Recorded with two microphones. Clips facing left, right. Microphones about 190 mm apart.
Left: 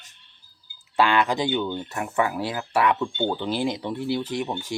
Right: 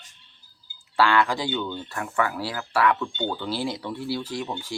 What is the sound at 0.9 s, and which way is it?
Speech, 20° left (ahead or behind).